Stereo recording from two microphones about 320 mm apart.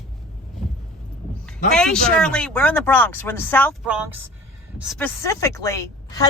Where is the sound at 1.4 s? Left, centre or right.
Centre.